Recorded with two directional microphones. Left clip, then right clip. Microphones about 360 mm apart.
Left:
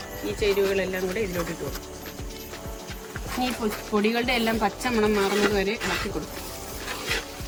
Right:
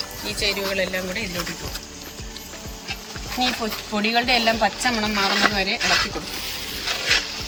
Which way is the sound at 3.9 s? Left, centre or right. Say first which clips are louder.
Right 4 dB; centre.